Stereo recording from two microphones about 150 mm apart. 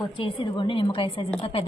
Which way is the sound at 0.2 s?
35° left (ahead or behind).